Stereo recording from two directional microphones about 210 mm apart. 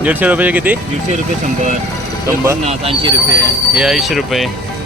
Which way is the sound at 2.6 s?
25° right (ahead or behind).